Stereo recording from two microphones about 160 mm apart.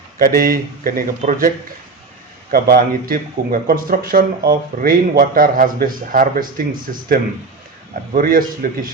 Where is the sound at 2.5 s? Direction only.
65° right (ahead or behind).